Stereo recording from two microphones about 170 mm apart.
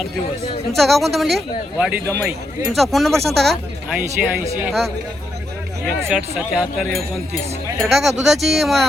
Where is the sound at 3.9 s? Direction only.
10° right (ahead or behind).